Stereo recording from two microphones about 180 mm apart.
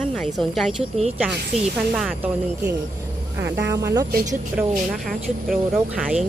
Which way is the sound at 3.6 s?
15° right (ahead or behind).